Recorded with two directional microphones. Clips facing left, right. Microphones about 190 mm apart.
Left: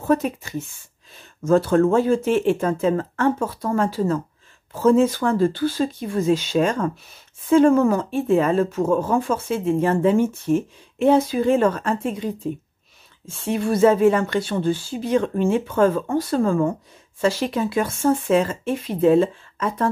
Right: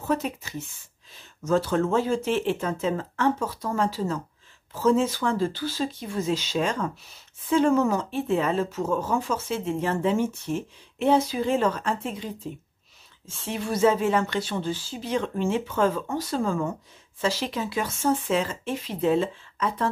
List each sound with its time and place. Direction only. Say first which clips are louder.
0.0 s speech: left 6 dB; 50° left (ahead or behind)
13.4 s speech: left 6 dB; 50° left (ahead or behind)